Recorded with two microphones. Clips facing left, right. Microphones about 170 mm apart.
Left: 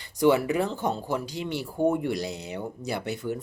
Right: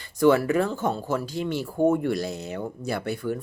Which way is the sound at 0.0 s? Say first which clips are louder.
Right 2 dB; 15° left (ahead or behind).